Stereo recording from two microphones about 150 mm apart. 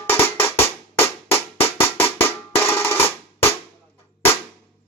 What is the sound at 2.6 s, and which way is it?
Drum, 15° left (ahead or behind).